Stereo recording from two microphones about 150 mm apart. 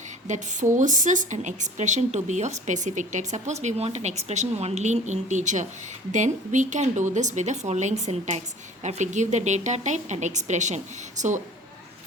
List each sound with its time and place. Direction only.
0.3 s a woman's voice: 55° right (ahead or behind)